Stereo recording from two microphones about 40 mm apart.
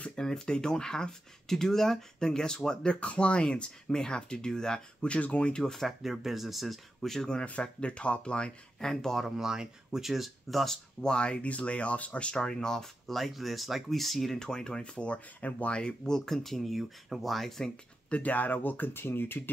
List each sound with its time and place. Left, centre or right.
0.1 s speech: centre
5.1 s speech: left
5.5 s speech: centre
5.8 s speech: centre
7.6 s speech: left
9.4 s speech: centre
11.0 s speech: left
12.4 s speech: centre
14.3 s speech: centre
15.0 s speech: left
15.8 s speech: centre
18.1 s speech: left
19.0 s speech: left